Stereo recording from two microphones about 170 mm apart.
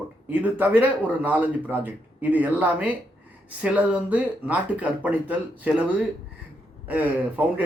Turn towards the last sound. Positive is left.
turn(degrees=-10)  # may be behind; listen again after turning